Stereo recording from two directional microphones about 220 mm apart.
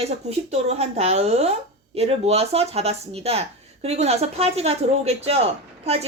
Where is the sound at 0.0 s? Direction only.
30° right (ahead or behind).